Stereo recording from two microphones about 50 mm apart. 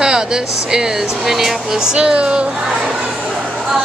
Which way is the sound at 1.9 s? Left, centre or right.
Right.